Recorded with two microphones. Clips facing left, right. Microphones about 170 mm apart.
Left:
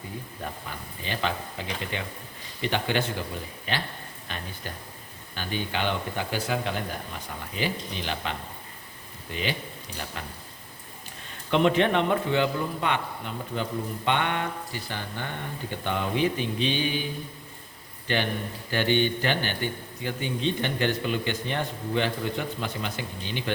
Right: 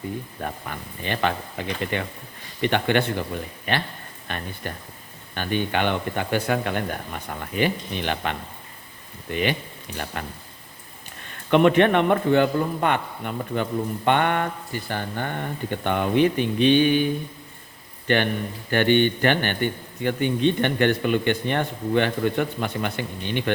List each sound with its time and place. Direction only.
0.4 s a man's voice: 60° right (ahead or behind)
11.5 s a man's voice: 60° right (ahead or behind)
18.1 s a man's voice: 60° right (ahead or behind)